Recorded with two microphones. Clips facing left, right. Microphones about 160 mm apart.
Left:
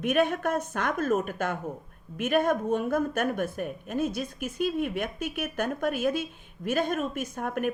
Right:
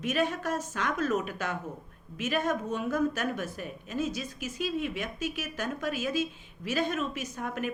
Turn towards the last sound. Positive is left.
turn(degrees=55)  # may be behind; listen again after turning